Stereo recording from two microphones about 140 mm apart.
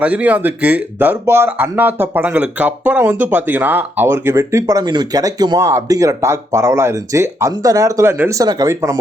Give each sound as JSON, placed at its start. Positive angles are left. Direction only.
{"t": 0.0, "sound": "speech", "side_deg": -10}